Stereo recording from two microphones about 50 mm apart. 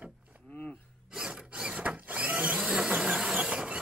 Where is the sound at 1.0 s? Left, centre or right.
Centre.